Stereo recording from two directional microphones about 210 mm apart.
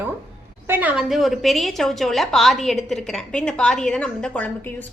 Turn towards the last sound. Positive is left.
turn(degrees=5)  # may be behind; listen again after turning